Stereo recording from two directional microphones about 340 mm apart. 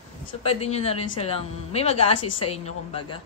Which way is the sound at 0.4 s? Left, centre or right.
Centre.